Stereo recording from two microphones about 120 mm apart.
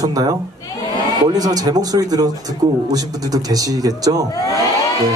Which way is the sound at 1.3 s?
30° right (ahead or behind).